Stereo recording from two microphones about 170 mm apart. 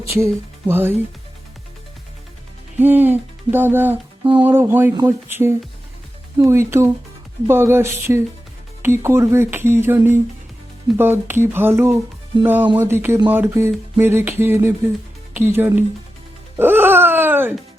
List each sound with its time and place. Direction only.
0.7 s speech: 10° right (ahead or behind)
2.7 s speech: 10° right (ahead or behind)
4.2 s music: 25° right (ahead or behind)
4.4 s speech: 10° right (ahead or behind)
16.6 s a sound: 10° right (ahead or behind)